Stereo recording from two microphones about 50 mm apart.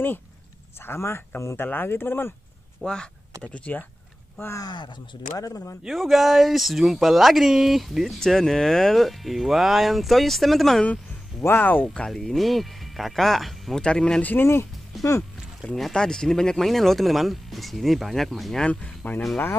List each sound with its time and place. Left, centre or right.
0.7 s speech: left
1.6 s speech: left
2.8 s speech: centre
4.4 s speech: left
5.3 s speech: left
5.9 s speech: centre
11.5 s speech: left
12.1 s speech: centre
13.7 s speech: centre
14.2 s speech: left
14.9 s a sound: centre
15.6 s speech: centre
18.6 s speech: left